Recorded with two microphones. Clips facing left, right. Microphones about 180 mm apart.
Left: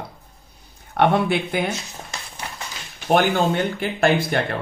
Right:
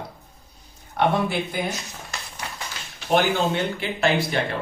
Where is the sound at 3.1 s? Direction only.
50° left (ahead or behind).